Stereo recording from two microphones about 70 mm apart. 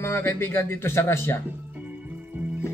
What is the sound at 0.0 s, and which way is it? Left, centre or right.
A man's voice, left.